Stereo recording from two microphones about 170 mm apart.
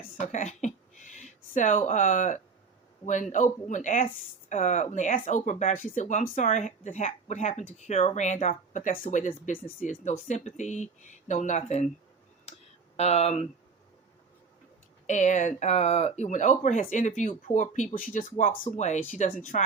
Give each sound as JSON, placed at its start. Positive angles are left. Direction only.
{"t": 0.2, "sound": "speech", "side_deg": 45}
{"t": 13.0, "sound": "speech", "side_deg": 40}
{"t": 15.0, "sound": "speech", "side_deg": 45}